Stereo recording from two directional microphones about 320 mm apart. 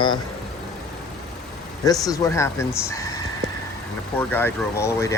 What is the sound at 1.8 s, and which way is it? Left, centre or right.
Speech, centre.